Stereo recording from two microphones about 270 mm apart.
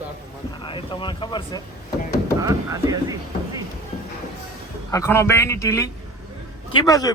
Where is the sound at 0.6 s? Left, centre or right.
Centre.